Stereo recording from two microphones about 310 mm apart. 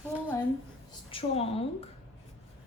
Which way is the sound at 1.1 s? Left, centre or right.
Centre.